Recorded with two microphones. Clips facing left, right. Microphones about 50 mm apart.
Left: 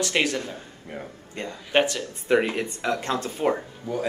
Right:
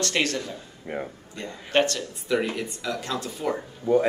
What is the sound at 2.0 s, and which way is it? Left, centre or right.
Speech, left.